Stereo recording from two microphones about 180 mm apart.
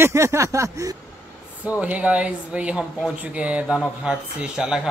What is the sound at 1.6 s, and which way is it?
Speech, 5° right (ahead or behind).